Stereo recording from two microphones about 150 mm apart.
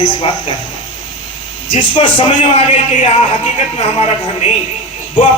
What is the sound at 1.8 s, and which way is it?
Speech, 35° left (ahead or behind).